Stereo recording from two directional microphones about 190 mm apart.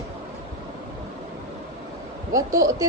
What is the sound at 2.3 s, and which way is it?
Speech, 20° right (ahead or behind).